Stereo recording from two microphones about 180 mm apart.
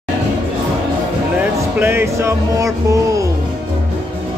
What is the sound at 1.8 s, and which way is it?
Music, 10° right (ahead or behind).